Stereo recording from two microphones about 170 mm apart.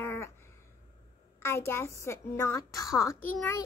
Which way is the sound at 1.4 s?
15° left (ahead or behind).